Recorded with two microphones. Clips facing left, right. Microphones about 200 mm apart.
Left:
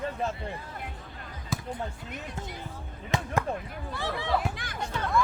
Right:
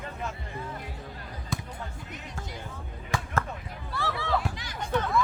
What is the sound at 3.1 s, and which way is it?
Basketball bounce, 20° left (ahead or behind).